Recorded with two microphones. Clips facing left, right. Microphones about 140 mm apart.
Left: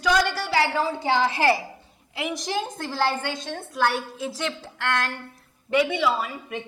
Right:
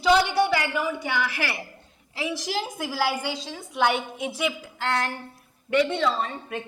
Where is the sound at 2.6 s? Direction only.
5° right (ahead or behind).